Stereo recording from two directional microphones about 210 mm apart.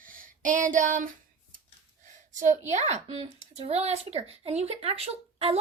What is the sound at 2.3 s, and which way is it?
A woman's voice, 35° right (ahead or behind).